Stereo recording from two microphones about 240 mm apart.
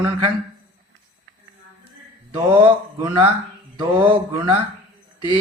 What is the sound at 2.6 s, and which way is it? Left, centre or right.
A man's voice, centre.